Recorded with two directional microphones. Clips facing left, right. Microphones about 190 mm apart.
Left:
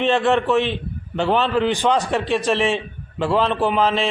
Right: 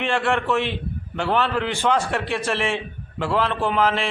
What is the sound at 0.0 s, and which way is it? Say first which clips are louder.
A man's voice: left 5 dB; 20° left (ahead or behind).